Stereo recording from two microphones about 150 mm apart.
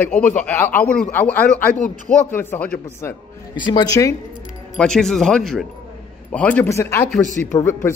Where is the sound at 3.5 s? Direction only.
30° left (ahead or behind).